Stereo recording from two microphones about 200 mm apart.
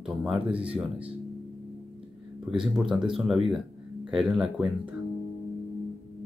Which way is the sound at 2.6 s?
5° right (ahead or behind).